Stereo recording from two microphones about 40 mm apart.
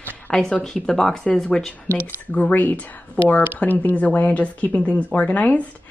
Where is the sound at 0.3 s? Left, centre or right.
Centre.